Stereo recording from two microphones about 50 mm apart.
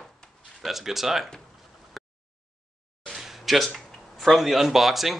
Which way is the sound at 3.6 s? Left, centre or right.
Centre.